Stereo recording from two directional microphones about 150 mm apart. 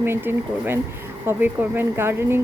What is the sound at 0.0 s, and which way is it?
A woman's voice, 15° right (ahead or behind).